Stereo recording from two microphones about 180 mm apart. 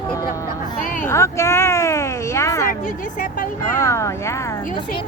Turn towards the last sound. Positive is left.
turn(degrees=15)  # may be behind; listen again after turning